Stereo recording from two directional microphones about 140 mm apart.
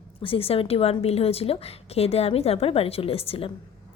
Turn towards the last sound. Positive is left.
turn(degrees=45)  # may be behind; listen again after turning